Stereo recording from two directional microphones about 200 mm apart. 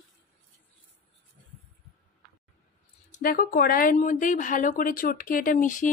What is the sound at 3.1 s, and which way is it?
Speech, 45° left (ahead or behind).